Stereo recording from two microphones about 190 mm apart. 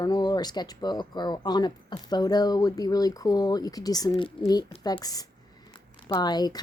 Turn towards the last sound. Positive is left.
turn(degrees=20)  # may be behind; listen again after turning